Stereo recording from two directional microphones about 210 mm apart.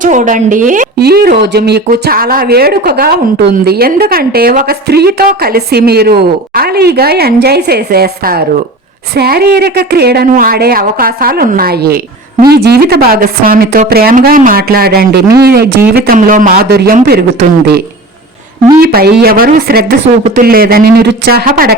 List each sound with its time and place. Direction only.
0.0 s a woman's voice: 35° right (ahead or behind)
18.8 s a woman's voice: 45° right (ahead or behind)